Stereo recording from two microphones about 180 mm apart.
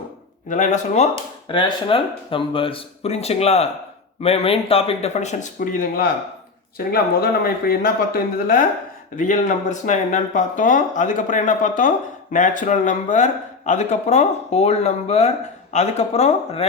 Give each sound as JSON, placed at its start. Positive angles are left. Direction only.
{"t": 0.4, "sound": "speech", "side_deg": 45}
{"t": 1.5, "sound": "speech", "side_deg": 30}